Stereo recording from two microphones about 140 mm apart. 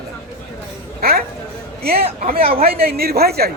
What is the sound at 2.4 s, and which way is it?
Speech, 45° right (ahead or behind).